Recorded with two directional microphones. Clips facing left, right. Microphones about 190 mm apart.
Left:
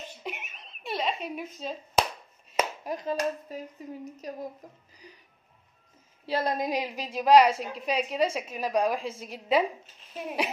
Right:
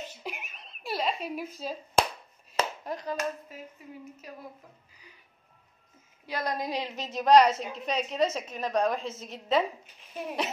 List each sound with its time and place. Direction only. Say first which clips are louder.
0.2 s a sound: left 1 dB; centre (ahead or behind)
2.8 s speech: left 3 dB; 20° left (ahead or behind)
3.2 s hands: left 4 dB; 40° left (ahead or behind)
6.2 s a woman's voice: left 4 dB; 25° left (ahead or behind); by 10.5 s 5° left (ahead or behind)